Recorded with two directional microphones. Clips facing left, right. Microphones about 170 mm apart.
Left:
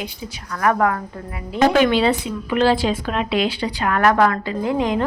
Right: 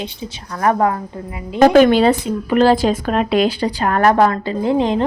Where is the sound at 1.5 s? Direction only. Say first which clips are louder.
Right 6 dB; 45° right (ahead or behind).